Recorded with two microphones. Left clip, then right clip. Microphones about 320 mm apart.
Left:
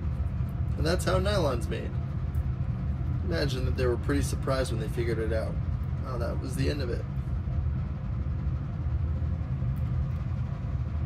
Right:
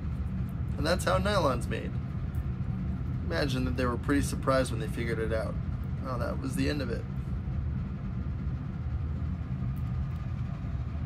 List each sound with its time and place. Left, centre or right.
0.8 s speech: centre
3.3 s speech: centre
6.4 s speech: centre